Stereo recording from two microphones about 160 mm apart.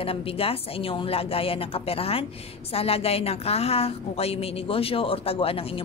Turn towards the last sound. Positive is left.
turn(degrees=35)  # may be behind; listen again after turning